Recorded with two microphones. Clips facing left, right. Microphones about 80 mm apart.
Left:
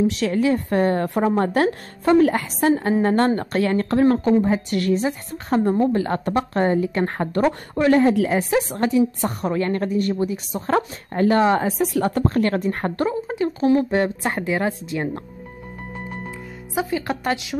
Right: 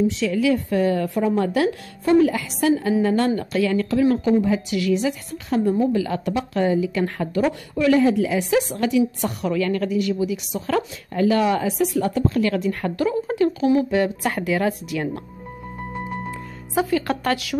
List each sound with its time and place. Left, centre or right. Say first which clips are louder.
0.0 s a woman's voice: left 1 dB; left
0.3 s a woman's voice: even; left
8.4 s a woman's voice: even; left
11.9 s a woman's voice: left 1 dB; left
13.1 s a woman's voice: right 3 dB; left
13.5 s a woman's voice: left 5 dB; left
16.7 s a woman's voice: right 3 dB; centre